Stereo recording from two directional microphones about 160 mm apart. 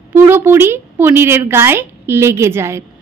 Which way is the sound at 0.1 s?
15° right (ahead or behind).